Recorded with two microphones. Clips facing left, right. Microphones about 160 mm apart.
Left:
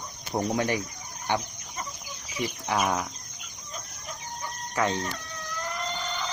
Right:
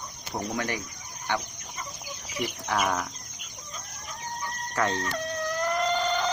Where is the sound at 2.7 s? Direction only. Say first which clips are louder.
Left 1 dB; 15° left (ahead or behind).